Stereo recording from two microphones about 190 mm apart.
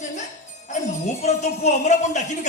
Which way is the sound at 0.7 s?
40° left (ahead or behind).